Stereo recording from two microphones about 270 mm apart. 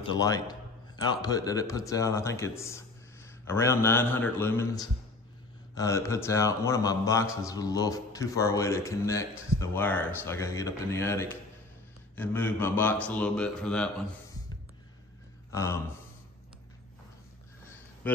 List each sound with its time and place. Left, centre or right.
0.0 s a man's voice: centre
15.5 s speech: centre